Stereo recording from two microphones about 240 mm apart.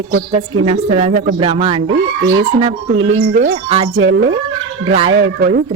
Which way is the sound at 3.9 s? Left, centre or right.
Right.